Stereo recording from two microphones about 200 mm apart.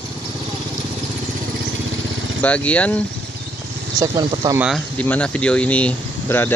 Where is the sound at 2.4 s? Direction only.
5° left (ahead or behind).